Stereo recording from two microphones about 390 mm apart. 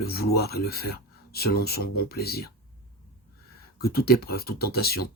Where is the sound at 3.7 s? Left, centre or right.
Left.